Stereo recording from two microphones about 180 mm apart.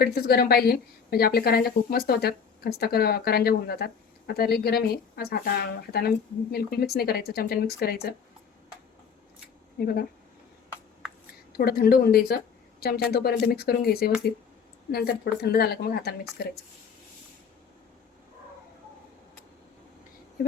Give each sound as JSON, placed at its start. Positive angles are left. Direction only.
{"t": 0.0, "sound": "a woman's voice", "side_deg": 60}
{"t": 9.7, "sound": "speech", "side_deg": 60}
{"t": 11.5, "sound": "a woman's voice", "side_deg": 60}